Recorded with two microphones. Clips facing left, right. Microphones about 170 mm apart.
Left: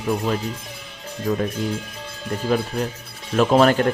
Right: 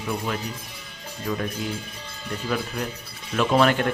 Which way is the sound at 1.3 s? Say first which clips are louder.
Left 5 dB; 45° left (ahead or behind).